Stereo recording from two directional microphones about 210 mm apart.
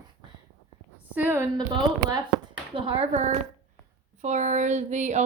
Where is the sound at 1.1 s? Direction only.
10° right (ahead or behind).